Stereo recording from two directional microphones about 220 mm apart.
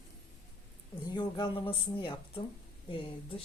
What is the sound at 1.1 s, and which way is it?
Speech, 20° left (ahead or behind).